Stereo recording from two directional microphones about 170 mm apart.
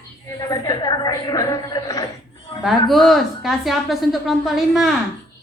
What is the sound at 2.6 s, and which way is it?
A woman's voice, centre (ahead or behind).